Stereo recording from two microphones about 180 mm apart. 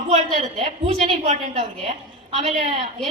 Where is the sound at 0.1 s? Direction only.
35° right (ahead or behind).